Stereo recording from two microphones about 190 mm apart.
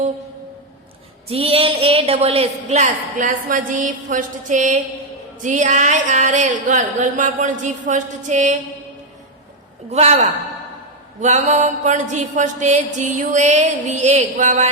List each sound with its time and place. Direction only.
1.3 s mantra: 30° right (ahead or behind)
9.9 s mantra: 35° right (ahead or behind)